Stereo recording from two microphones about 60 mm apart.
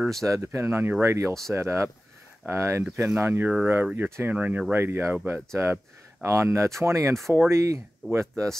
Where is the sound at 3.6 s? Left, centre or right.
Right.